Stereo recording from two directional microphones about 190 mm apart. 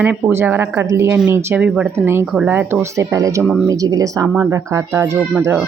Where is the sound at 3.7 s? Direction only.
20° right (ahead or behind).